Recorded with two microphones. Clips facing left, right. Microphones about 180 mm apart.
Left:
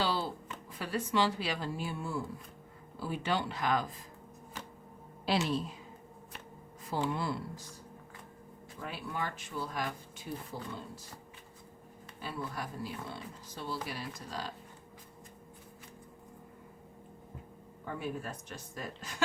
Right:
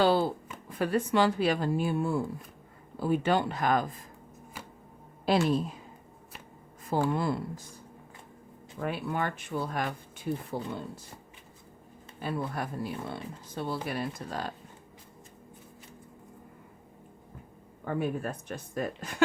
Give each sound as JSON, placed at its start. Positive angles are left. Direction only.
{"t": 0.0, "sound": "a sound", "side_deg": -50}
{"t": 0.7, "sound": "speech", "side_deg": -55}
{"t": 5.5, "sound": "speech", "side_deg": -45}
{"t": 6.8, "sound": "speech", "side_deg": -50}
{"t": 8.8, "sound": "speech", "side_deg": -60}
{"t": 12.2, "sound": "speech", "side_deg": -55}
{"t": 17.8, "sound": "speech", "side_deg": -55}